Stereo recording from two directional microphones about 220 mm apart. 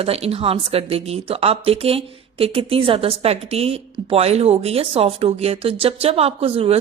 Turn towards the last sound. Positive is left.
turn(degrees=-25)  # may be behind; listen again after turning